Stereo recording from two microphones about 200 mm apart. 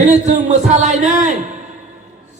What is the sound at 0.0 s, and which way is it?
Speech, 35° right (ahead or behind).